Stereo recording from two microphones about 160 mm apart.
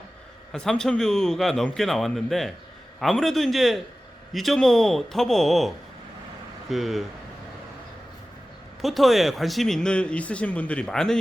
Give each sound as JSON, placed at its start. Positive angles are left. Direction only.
{"t": 0.5, "sound": "speech", "side_deg": 5}
{"t": 8.8, "sound": "speech", "side_deg": 0}